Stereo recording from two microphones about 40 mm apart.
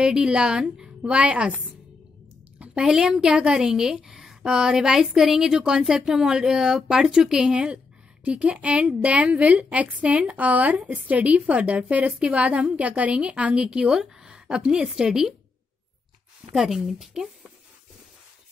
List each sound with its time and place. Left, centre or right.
0.0 s a woman's voice: centre
2.7 s a woman's voice: right
3.0 s a woman's voice: centre
16.5 s a woman's voice: centre